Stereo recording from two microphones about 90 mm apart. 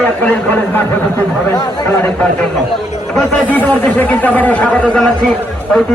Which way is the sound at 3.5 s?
20° left (ahead or behind).